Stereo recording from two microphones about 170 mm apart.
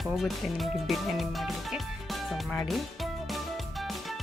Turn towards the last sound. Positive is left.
turn(degrees=0)  # may be behind; listen again after turning